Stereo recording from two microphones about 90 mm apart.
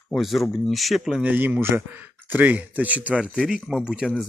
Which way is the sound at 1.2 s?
20° right (ahead or behind).